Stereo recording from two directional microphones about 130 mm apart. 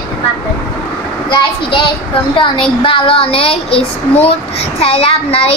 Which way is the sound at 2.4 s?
40° left (ahead or behind).